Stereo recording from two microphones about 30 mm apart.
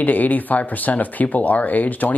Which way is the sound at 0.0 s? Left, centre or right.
Left.